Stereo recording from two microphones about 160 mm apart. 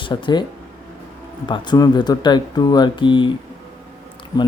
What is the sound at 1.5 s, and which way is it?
A man's voice, 25° left (ahead or behind).